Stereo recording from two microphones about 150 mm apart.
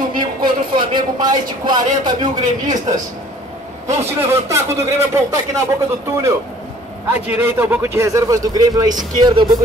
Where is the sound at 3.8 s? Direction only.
20° right (ahead or behind).